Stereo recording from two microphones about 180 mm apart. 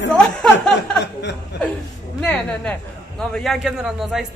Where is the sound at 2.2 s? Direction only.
Centre (ahead or behind).